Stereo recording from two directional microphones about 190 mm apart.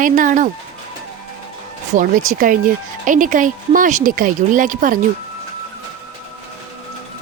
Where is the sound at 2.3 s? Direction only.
45° right (ahead or behind).